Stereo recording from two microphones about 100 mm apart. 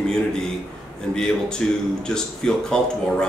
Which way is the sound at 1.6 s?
10° left (ahead or behind).